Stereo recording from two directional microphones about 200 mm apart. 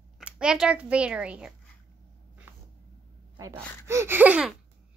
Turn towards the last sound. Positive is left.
turn(degrees=-5)  # may be behind; listen again after turning